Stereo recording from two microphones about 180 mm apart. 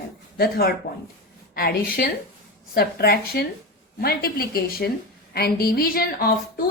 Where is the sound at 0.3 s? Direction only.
60° left (ahead or behind).